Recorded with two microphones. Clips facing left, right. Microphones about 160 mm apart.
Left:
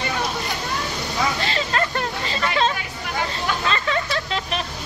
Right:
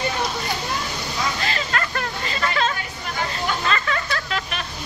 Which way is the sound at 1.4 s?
20° left (ahead or behind).